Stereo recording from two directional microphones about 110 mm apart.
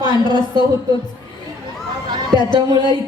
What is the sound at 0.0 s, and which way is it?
Speech, 40° left (ahead or behind).